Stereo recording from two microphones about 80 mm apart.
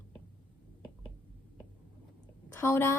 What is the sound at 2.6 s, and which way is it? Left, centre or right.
Speech, left.